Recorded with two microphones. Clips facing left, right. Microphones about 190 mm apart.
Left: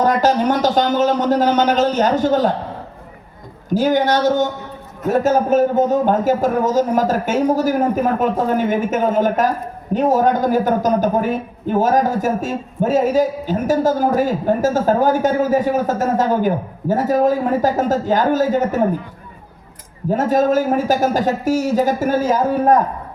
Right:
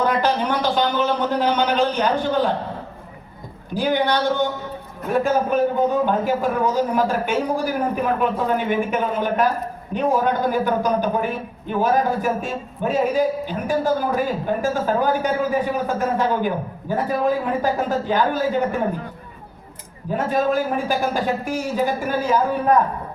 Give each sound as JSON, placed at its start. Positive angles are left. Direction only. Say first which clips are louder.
{"t": 0.0, "sound": "a man's voice", "louder": "left 5 dB", "side_deg": 40}
{"t": 3.8, "sound": "a man's voice", "louder": "left 4 dB", "side_deg": 45}
{"t": 20.1, "sound": "a man's voice", "louder": "left 5 dB", "side_deg": 40}